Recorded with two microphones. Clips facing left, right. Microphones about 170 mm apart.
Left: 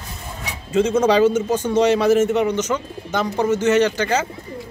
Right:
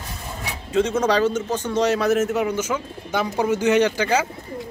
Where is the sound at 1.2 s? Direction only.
15° left (ahead or behind).